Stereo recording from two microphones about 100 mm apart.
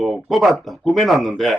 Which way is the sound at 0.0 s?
Centre (ahead or behind).